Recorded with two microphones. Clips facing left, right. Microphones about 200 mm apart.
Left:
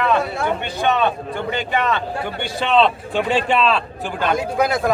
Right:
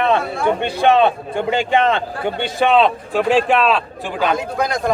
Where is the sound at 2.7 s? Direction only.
10° right (ahead or behind).